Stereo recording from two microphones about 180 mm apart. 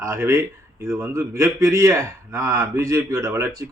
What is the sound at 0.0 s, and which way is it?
A man's voice, 15° right (ahead or behind).